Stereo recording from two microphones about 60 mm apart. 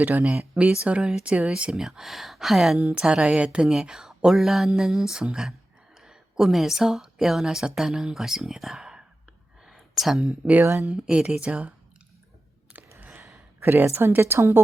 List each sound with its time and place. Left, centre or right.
0.0 s a woman's voice: right
0.3 s speech: centre
2.7 s a woman's voice: centre
3.7 s speech: centre
9.6 s a sound: centre
10.2 s a woman's voice: right
13.6 s a woman's voice: right
13.8 s a woman's voice: right